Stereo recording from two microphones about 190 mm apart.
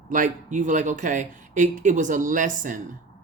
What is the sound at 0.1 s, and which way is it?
Speech, 45° right (ahead or behind).